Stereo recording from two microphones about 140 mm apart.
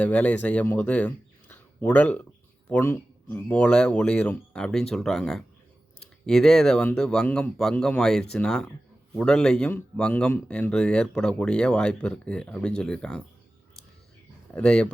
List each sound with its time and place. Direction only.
0.0 s speech: 10° left (ahead or behind)
14.5 s speech: 5° left (ahead or behind)